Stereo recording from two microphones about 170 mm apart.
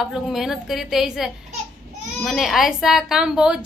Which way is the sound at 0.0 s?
Centre (ahead or behind).